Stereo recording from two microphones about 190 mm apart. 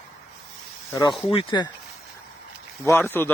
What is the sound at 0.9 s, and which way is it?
Speech, 20° left (ahead or behind).